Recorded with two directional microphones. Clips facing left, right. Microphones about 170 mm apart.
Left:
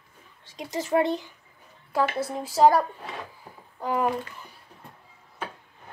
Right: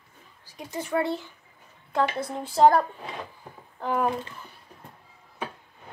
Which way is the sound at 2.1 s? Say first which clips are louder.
Left 1 dB; 5° left (ahead or behind).